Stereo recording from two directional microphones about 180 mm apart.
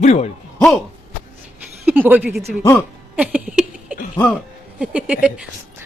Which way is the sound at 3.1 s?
10° right (ahead or behind).